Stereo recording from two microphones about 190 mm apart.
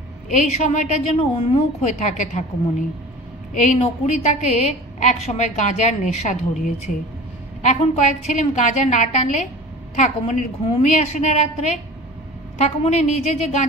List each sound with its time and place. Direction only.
0.3 s a woman's voice: 40° left (ahead or behind)
3.5 s a woman's voice: 40° left (ahead or behind)
7.6 s a woman's voice: 40° left (ahead or behind)